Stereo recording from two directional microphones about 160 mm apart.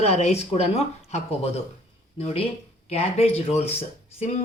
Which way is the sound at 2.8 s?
40° left (ahead or behind).